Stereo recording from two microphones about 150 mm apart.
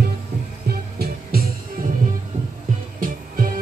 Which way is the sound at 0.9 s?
90° right.